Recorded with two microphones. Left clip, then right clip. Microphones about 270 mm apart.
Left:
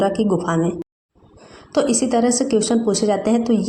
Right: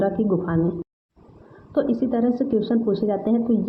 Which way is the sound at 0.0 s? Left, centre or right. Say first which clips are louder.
Left 4 dB; left.